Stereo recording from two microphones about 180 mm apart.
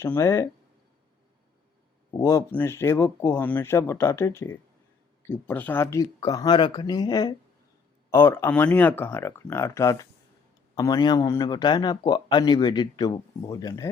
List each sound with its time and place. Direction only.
0.0 s speech: 15° left (ahead or behind)
2.2 s speech: 10° left (ahead or behind)